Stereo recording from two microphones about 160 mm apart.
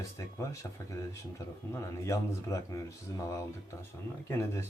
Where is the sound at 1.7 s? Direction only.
20° left (ahead or behind).